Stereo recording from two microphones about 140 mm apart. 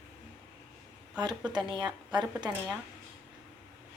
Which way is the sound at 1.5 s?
30° right (ahead or behind).